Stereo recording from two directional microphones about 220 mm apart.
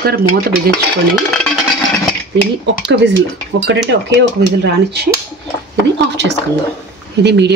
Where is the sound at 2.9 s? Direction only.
55° right (ahead or behind).